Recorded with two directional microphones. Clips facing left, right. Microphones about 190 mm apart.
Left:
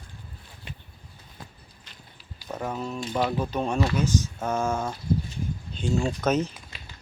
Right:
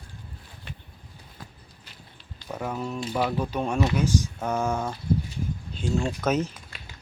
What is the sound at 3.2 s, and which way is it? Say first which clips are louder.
Speech: even; 5° left (ahead or behind).